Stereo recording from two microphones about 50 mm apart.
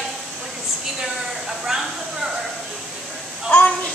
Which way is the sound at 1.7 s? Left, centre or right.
Centre.